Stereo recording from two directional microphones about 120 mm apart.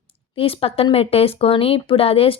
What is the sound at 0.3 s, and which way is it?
Speech, 50° left (ahead or behind).